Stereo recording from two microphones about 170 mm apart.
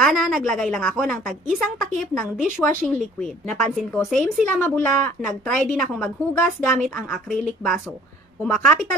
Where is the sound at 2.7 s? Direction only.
55° right (ahead or behind).